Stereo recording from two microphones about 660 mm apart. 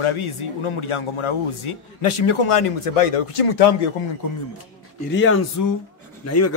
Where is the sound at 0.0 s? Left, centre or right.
Left.